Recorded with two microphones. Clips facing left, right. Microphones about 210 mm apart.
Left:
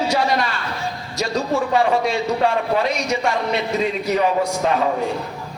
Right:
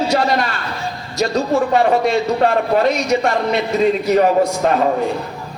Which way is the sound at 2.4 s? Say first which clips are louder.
Right 4 dB; 45° right (ahead or behind).